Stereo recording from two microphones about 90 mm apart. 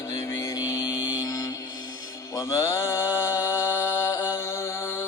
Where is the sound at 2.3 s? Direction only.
35° left (ahead or behind).